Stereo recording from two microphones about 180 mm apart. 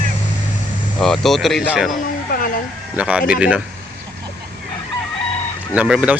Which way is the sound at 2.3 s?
50° left (ahead or behind).